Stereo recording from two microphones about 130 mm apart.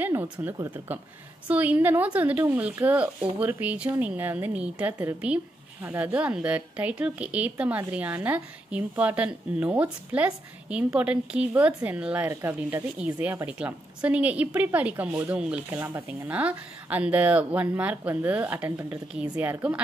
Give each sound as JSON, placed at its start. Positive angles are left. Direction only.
{"t": 0.0, "sound": "speech", "side_deg": -15}